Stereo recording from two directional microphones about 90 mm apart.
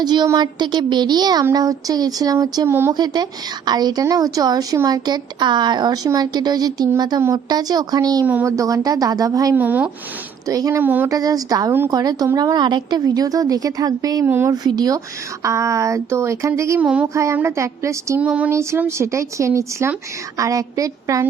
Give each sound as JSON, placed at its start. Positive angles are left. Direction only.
{"t": 0.0, "sound": "a woman's voice", "side_deg": -50}
{"t": 2.6, "sound": "speech", "side_deg": -30}
{"t": 2.9, "sound": "a woman's voice", "side_deg": -50}
{"t": 9.6, "sound": "speech", "side_deg": -20}
{"t": 10.4, "sound": "speech", "side_deg": -40}
{"t": 10.8, "sound": "speech", "side_deg": -25}
{"t": 11.1, "sound": "a woman's voice", "side_deg": -40}
{"t": 14.3, "sound": "speech", "side_deg": -25}
{"t": 14.5, "sound": "a woman's voice", "side_deg": -45}
{"t": 16.8, "sound": "a sound", "side_deg": -15}
{"t": 17.3, "sound": "speech", "side_deg": -30}
{"t": 18.2, "sound": "a sound", "side_deg": -15}
{"t": 18.9, "sound": "speech", "side_deg": -30}